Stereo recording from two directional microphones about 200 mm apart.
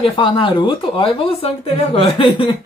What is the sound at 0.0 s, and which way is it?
Speech, 25° left (ahead or behind).